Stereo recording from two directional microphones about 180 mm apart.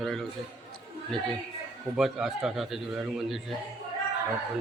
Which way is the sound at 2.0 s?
5° right (ahead or behind).